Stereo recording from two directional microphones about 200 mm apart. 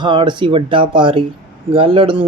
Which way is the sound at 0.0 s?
25° right (ahead or behind).